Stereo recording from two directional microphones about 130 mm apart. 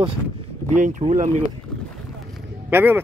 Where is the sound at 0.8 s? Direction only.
65° right (ahead or behind).